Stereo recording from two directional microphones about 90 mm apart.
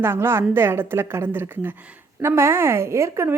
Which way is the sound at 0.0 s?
30° right (ahead or behind).